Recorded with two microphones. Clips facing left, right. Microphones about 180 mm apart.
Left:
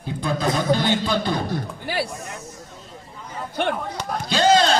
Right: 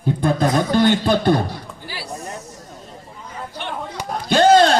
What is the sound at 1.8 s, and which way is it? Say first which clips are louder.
Music: left 9 dB; 60° left (ahead or behind).